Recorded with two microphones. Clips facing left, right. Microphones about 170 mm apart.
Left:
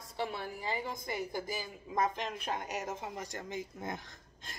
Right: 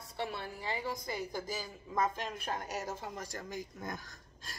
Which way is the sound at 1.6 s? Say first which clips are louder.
Even; 15° left (ahead or behind).